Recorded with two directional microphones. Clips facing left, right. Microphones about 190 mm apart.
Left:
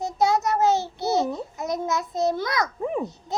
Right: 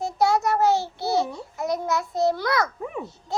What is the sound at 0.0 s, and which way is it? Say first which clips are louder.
Babbling: even; 20° left (ahead or behind).